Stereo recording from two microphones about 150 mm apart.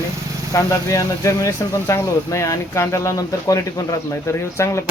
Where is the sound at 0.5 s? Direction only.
20° left (ahead or behind).